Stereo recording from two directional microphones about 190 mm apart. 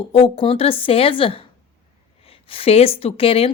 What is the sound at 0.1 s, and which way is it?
A woman's voice, 30° left (ahead or behind).